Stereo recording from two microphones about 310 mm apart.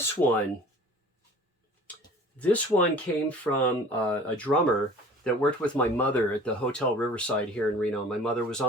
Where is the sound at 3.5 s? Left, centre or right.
Centre.